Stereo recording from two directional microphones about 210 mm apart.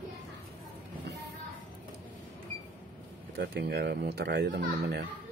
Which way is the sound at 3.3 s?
50° right (ahead or behind).